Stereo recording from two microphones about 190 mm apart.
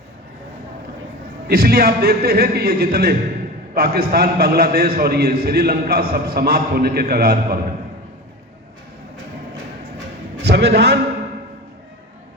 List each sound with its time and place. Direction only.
1.5 s a man's voice: 50° right (ahead or behind)
10.4 s a man's voice: 60° right (ahead or behind)